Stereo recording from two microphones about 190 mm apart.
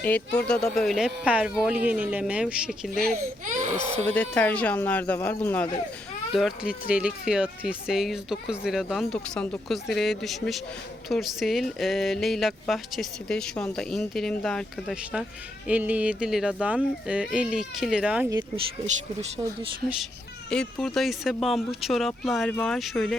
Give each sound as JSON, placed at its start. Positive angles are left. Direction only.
{"t": 0.0, "sound": "speech", "side_deg": 5}
{"t": 3.1, "sound": "speech", "side_deg": -40}
{"t": 4.1, "sound": "speech", "side_deg": 10}
{"t": 6.3, "sound": "speech", "side_deg": -5}
{"t": 18.3, "sound": "speech", "side_deg": -20}
{"t": 20.5, "sound": "speech", "side_deg": 5}